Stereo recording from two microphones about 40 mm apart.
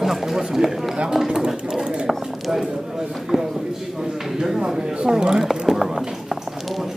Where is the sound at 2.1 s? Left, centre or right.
Centre.